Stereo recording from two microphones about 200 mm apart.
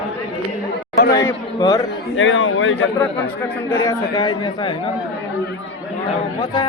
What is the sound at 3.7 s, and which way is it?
Speech, 15° left (ahead or behind).